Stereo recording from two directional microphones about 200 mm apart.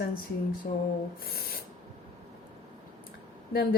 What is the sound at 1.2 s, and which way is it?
Speech, 50° left (ahead or behind).